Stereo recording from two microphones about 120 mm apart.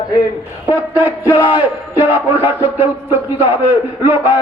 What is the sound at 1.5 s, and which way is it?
Speech, 45° left (ahead or behind).